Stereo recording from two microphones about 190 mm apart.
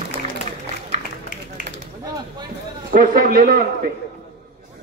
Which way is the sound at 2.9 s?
45° right (ahead or behind).